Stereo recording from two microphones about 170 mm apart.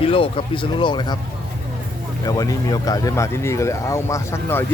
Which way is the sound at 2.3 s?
20° left (ahead or behind).